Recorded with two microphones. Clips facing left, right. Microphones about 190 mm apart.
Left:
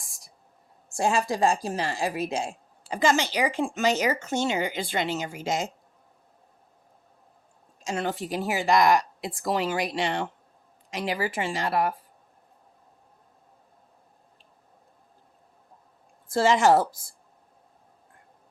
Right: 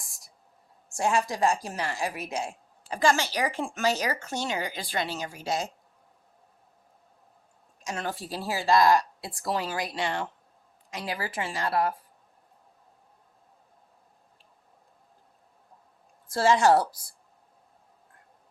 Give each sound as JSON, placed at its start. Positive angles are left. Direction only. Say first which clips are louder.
{"t": 0.9, "sound": "a woman's voice", "louder": "left 2 dB", "side_deg": 30}
{"t": 7.9, "sound": "a woman's voice", "louder": "left 5 dB", "side_deg": 25}
{"t": 16.3, "sound": "a woman's voice", "louder": "left 1 dB", "side_deg": 20}